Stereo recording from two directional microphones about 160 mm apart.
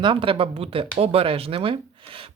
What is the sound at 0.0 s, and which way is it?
Speech, 30° right (ahead or behind).